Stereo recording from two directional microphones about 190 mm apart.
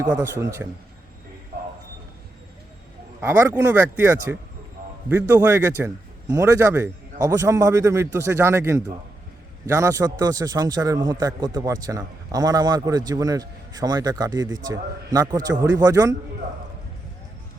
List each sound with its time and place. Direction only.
0.0 s a man's voice: 15° right (ahead or behind)
3.2 s a man's voice: 10° right (ahead or behind)